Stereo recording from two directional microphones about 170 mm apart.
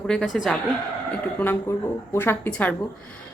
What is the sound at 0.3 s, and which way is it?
Speech, centre (ahead or behind).